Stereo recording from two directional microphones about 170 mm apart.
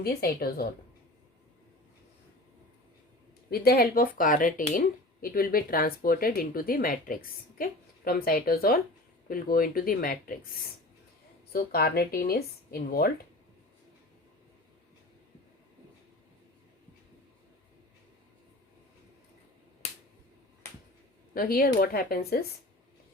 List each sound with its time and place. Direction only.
0.0 s speech: 65° left (ahead or behind)
3.5 s speech: 60° left (ahead or behind)
11.5 s speech: 65° left (ahead or behind)
19.8 s finger snapping: 40° left (ahead or behind)
21.3 s speech: 60° left (ahead or behind)